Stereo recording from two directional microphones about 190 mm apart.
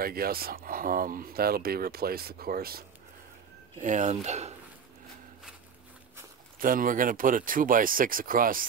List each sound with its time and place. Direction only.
0.0 s speech: 50° right (ahead or behind)
3.8 s speech: 40° right (ahead or behind)
6.6 s speech: 45° right (ahead or behind)